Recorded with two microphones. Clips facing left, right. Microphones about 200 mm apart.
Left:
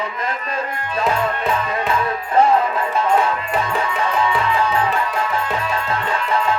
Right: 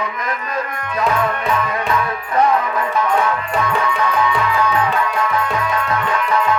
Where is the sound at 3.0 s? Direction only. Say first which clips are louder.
Left 1 dB; 30° left (ahead or behind).